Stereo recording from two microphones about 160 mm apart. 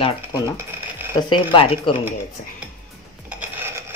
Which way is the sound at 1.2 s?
30° left (ahead or behind).